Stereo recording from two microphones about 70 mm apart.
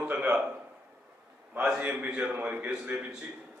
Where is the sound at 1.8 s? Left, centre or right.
Centre.